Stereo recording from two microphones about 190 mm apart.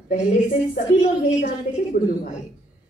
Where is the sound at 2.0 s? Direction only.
45° left (ahead or behind).